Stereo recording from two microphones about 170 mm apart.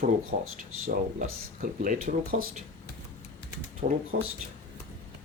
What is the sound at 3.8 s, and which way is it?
Speech, 50° right (ahead or behind).